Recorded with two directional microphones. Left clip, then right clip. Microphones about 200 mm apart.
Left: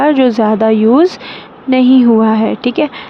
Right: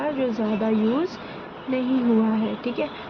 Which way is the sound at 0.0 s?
55° left (ahead or behind).